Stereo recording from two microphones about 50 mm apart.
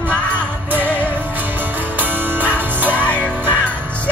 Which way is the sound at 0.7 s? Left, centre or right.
Right.